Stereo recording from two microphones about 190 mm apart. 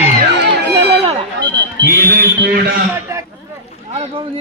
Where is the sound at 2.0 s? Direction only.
55° right (ahead or behind).